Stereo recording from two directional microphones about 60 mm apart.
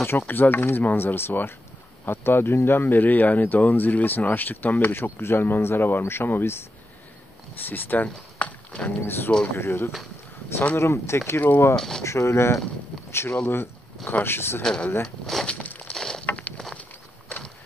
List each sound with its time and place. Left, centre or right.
0.3 s speech: left
8.8 s speech: left
11.4 s speech: left
11.7 s speech: centre
12.0 s speech: left
14.6 s speech: centre
15.4 s a sound: left
15.9 s vehicle: centre